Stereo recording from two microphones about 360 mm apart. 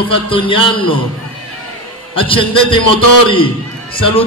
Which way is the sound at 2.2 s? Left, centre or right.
Centre.